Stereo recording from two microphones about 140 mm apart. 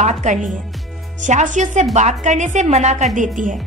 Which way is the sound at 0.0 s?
55° right (ahead or behind).